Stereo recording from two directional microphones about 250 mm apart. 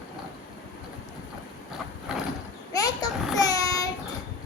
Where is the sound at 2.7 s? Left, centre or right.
Centre.